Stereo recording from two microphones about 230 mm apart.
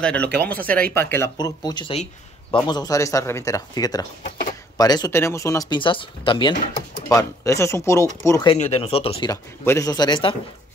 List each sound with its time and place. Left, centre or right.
0.0 s speech: centre
8.5 s speech: left